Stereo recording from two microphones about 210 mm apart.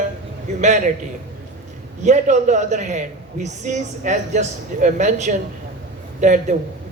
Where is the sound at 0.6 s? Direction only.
35° right (ahead or behind).